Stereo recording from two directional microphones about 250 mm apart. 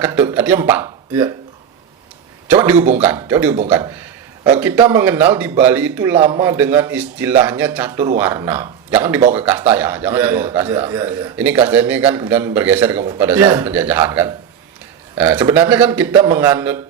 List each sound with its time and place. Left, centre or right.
0.0 s a man's voice: centre
2.5 s a man's voice: centre